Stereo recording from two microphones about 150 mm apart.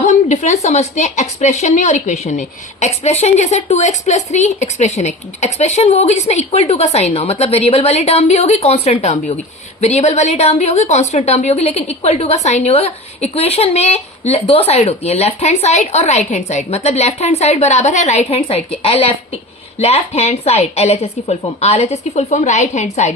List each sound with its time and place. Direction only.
0.0 s a woman's voice: 50° left (ahead or behind)